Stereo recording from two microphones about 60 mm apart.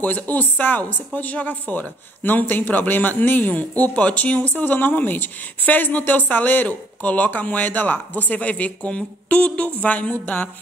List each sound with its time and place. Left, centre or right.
0.0 s speech: left